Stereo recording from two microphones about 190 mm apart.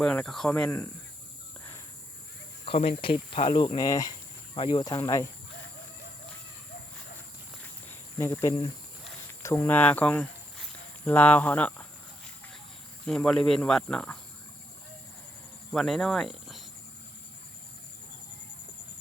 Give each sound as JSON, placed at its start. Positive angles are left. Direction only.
{"t": 0.0, "sound": "speech", "side_deg": 5}
{"t": 2.6, "sound": "speech", "side_deg": 30}
{"t": 3.8, "sound": "speech", "side_deg": 20}
{"t": 7.6, "sound": "walk", "side_deg": 10}
{"t": 8.3, "sound": "speech", "side_deg": 20}
{"t": 13.1, "sound": "speech", "side_deg": 5}
{"t": 15.7, "sound": "speech", "side_deg": 0}